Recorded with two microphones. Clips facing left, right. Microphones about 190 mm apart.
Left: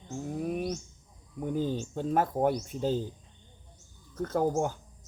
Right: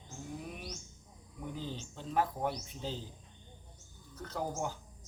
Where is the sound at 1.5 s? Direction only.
50° left (ahead or behind).